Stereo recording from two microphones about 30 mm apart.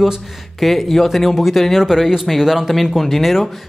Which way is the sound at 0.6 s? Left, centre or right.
Centre.